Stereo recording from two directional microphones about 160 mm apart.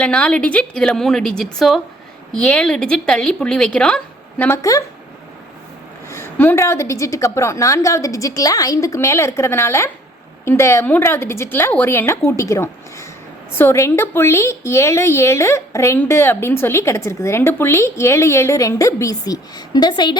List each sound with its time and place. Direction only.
0.0 s speech: 5° left (ahead or behind)
6.1 s a woman's voice: 15° left (ahead or behind)